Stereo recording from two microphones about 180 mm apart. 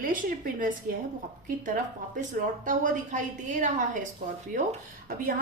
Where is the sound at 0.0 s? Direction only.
50° right (ahead or behind).